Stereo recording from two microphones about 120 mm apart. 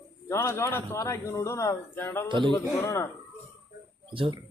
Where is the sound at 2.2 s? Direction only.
40° right (ahead or behind).